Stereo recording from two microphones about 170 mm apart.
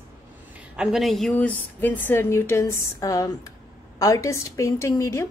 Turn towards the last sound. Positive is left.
turn(degrees=15)  # may be behind; listen again after turning